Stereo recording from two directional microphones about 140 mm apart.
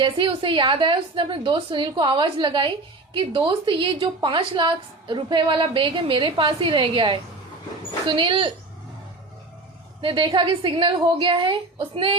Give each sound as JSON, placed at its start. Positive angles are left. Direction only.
{"t": 0.0, "sound": "a woman's voice", "side_deg": -35}
{"t": 10.0, "sound": "a woman's voice", "side_deg": -35}